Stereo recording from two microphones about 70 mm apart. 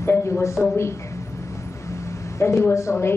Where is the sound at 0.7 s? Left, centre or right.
Left.